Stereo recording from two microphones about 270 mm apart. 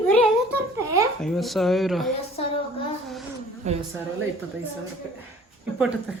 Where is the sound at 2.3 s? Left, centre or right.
Left.